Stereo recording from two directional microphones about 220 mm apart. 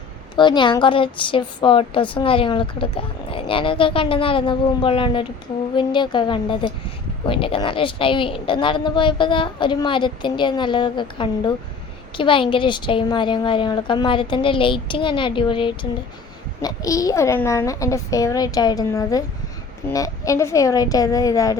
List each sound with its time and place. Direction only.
0.3 s a woman's voice: 20° left (ahead or behind)